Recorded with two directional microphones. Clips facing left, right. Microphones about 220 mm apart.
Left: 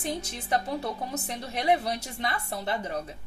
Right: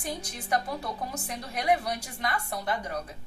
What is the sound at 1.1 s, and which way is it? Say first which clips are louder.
A woman's voice: left 2 dB; 25° left (ahead or behind).